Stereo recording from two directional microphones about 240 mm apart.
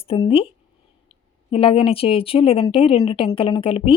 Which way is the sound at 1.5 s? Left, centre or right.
Left.